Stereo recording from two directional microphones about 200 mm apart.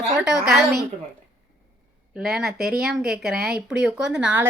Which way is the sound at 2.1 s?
Centre (ahead or behind).